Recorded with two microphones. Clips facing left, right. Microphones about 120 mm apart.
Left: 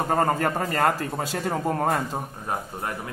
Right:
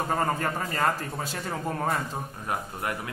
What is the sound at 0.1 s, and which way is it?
A man's voice, 40° left (ahead or behind).